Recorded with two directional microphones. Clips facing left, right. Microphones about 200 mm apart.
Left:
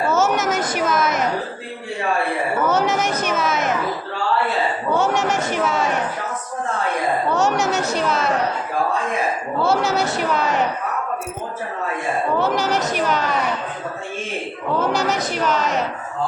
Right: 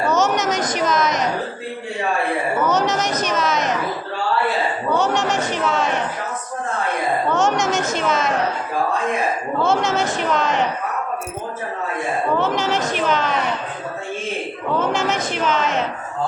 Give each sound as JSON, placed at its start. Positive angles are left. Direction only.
{"t": 0.0, "sound": "a sound", "side_deg": 5}
{"t": 2.6, "sound": "speech", "side_deg": 10}
{"t": 4.9, "sound": "chatter", "side_deg": 10}
{"t": 7.3, "sound": "a sound", "side_deg": 5}
{"t": 7.8, "sound": "a sound", "side_deg": 35}
{"t": 9.6, "sound": "a woman's voice", "side_deg": 5}
{"t": 12.4, "sound": "a woman's voice", "side_deg": 40}
{"t": 13.0, "sound": "speech", "side_deg": 10}
{"t": 14.9, "sound": "a woman's voice", "side_deg": 40}
{"t": 15.4, "sound": "a woman's voice", "side_deg": 0}